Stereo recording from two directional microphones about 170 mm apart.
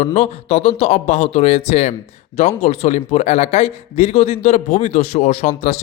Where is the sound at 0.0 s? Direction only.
40° left (ahead or behind).